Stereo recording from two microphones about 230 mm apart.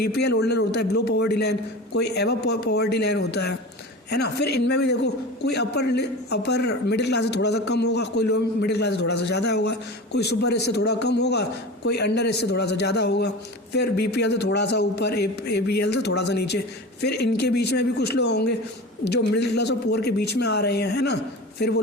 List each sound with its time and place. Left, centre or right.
0.0 s a man's voice: left